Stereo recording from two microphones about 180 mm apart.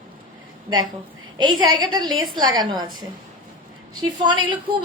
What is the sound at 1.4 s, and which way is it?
A woman's voice, 25° right (ahead or behind).